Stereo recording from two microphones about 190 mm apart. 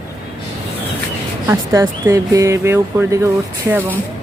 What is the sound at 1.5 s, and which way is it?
Speech, 15° right (ahead or behind).